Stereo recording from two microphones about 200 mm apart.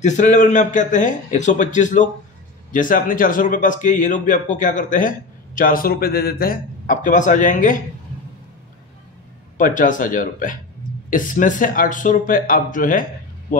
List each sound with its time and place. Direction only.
0.0 s a man's voice: 35° left (ahead or behind)
9.6 s a man's voice: 40° left (ahead or behind)